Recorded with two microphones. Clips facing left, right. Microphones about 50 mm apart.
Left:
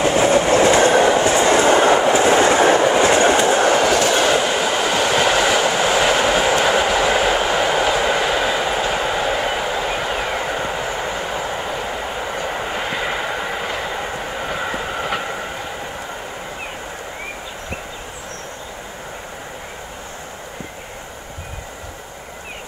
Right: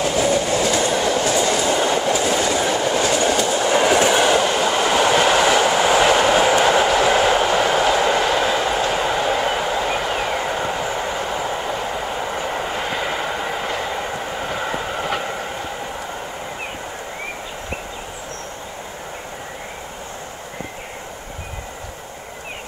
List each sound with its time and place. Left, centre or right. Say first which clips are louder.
0.0 s train: left 4 dB; left
1.0 s train: left 4 dB; left
2.0 s train: left 5 dB; left
2.8 s train: left 5 dB; left
3.7 s train: even; centre
4.3 s train: even; centre